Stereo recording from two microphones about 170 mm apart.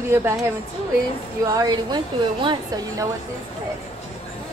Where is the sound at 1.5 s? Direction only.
25° right (ahead or behind).